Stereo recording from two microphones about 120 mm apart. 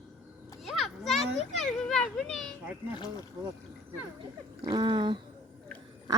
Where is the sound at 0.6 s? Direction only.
Centre (ahead or behind).